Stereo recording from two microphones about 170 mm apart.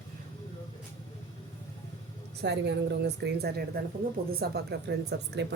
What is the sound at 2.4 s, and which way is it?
Speech, 90° right.